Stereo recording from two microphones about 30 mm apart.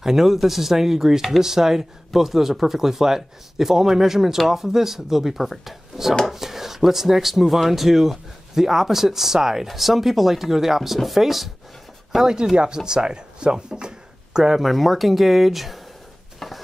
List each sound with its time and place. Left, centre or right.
0.0 s speech: centre
12.5 s speech: right
14.6 s speech: centre
16.3 s stir: centre